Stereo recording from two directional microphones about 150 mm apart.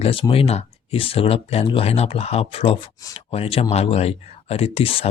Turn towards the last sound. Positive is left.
turn(degrees=40)  # may be behind; listen again after turning